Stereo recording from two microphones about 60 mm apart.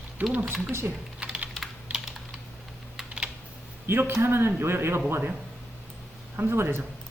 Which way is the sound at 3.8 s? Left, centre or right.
Right.